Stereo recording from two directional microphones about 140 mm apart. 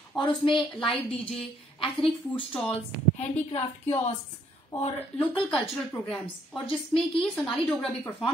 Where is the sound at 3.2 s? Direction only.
50° left (ahead or behind).